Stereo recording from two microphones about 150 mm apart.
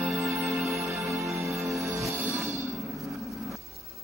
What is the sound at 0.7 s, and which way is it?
Music, centre (ahead or behind).